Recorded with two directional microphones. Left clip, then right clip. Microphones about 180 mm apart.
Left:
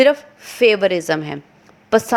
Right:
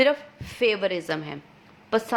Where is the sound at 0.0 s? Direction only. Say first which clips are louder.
Left 7 dB; 30° left (ahead or behind).